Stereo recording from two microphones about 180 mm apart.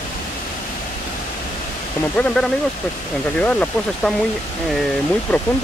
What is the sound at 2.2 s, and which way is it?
Speech, 10° left (ahead or behind).